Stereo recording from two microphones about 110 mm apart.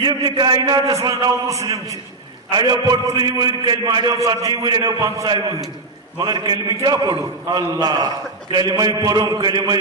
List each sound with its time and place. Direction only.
0.0 s a man's voice: 45° right (ahead or behind)